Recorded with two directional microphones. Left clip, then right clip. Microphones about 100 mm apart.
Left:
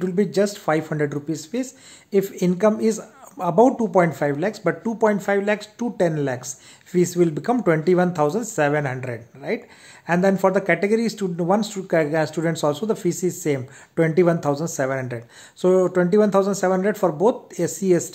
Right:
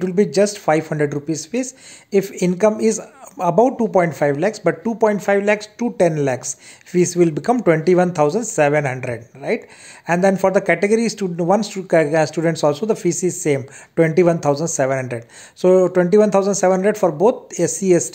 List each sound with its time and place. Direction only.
0.0 s speech: 25° right (ahead or behind)